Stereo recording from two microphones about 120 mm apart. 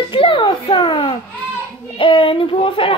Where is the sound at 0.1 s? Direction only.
45° left (ahead or behind).